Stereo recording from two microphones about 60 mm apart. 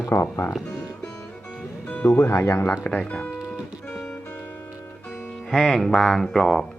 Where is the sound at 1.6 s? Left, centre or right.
Left.